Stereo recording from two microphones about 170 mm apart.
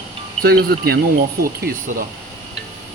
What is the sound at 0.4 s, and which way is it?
Speech, 65° right (ahead or behind).